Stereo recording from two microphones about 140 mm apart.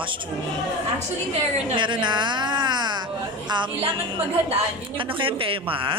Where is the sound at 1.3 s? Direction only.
40° right (ahead or behind).